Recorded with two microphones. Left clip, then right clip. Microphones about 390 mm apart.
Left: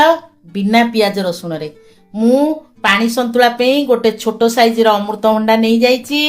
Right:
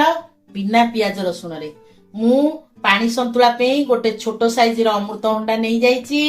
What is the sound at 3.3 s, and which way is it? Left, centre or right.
A woman's voice, left.